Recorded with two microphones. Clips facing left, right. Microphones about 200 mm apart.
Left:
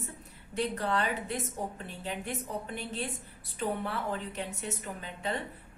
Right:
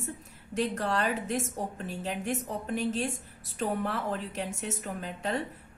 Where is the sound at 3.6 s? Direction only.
40° right (ahead or behind).